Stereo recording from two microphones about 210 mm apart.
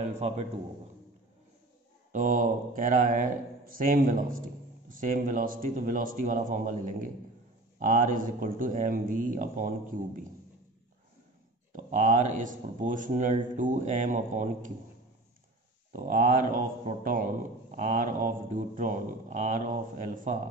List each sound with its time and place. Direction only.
2.1 s a man's voice: 40° right (ahead or behind)
11.7 s a man's voice: 40° right (ahead or behind)
15.9 s a man's voice: 40° right (ahead or behind)